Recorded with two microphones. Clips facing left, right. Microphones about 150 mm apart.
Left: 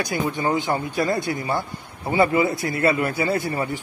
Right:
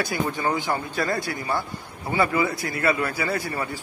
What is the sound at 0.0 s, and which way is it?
Speech, 20° left (ahead or behind).